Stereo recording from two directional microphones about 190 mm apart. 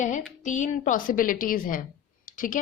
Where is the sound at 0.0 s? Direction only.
40° left (ahead or behind).